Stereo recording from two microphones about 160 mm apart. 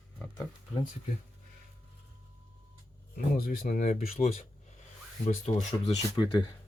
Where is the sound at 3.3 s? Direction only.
65° left (ahead or behind).